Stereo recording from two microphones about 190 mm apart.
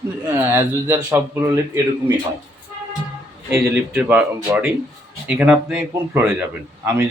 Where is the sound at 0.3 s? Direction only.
15° right (ahead or behind).